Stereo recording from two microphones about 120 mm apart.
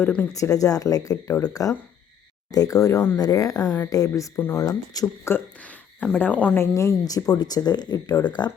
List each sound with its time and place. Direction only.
0.0 s speech: 15° left (ahead or behind)
0.3 s speech: 30° left (ahead or behind)
1.3 s speech: 10° left (ahead or behind)
2.5 s speech: 30° left (ahead or behind)
5.5 s speech: 10° left (ahead or behind)
6.7 s speech: 30° left (ahead or behind)